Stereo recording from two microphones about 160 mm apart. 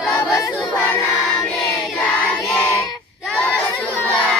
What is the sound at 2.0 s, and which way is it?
Child singing, 5° left (ahead or behind).